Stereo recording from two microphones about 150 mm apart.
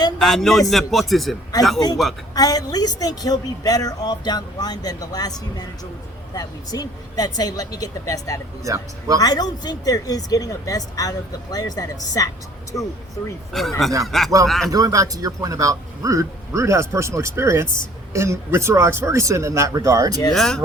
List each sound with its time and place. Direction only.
0.2 s speech: centre (ahead or behind)
2.3 s speech: 25° left (ahead or behind)
8.6 s speech: 20° right (ahead or behind)
9.2 s speech: 25° left (ahead or behind)
13.5 s speech: centre (ahead or behind)
14.7 s speech: 20° right (ahead or behind)
20.3 s speech: centre (ahead or behind)